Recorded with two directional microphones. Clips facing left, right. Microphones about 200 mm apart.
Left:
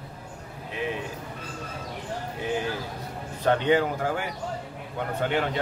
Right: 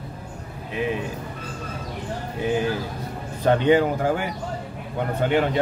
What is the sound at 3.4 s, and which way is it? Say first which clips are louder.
Speech: right 4 dB; 10° right (ahead or behind).